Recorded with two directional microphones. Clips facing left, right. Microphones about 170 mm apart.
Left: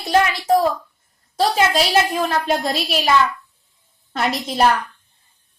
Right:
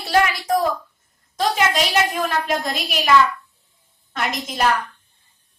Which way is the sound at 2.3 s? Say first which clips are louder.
Left 3 dB; 30° left (ahead or behind).